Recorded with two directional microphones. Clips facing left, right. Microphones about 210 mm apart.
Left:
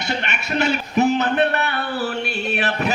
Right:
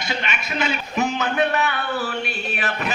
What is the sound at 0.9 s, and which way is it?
A man's voice, 35° left (ahead or behind).